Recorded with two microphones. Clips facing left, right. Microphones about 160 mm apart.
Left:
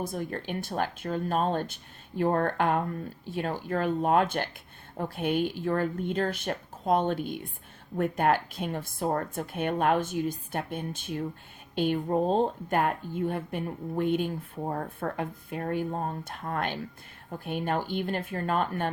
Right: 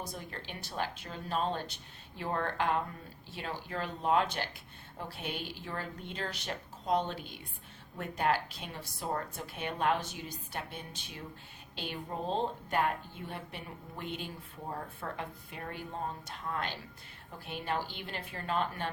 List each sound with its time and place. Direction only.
0.0 s speech: 50° left (ahead or behind)